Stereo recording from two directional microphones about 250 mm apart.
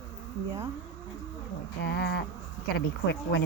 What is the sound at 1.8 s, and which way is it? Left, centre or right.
Speech, left.